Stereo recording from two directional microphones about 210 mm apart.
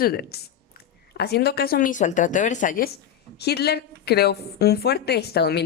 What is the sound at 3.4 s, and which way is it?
A woman's voice, 50° left (ahead or behind).